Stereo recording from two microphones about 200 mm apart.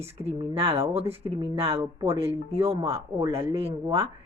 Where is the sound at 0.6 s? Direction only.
30° right (ahead or behind).